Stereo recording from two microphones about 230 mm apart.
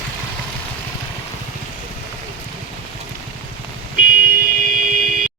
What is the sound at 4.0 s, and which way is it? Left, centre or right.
Vehicle, right.